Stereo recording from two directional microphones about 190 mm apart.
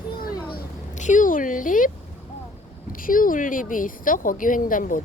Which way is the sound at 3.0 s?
45° left (ahead or behind).